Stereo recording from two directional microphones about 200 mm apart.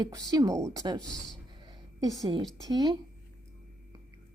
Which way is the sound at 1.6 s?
20° right (ahead or behind).